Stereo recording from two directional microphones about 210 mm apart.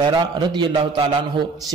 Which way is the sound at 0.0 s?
20° right (ahead or behind).